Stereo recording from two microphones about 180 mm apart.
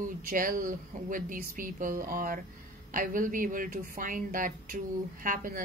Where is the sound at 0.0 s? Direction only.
50° right (ahead or behind).